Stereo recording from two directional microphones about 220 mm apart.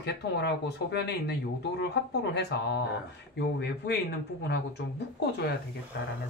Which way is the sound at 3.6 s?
50° left (ahead or behind).